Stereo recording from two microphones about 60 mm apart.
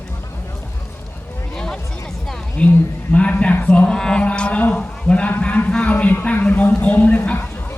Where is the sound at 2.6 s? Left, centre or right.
Left.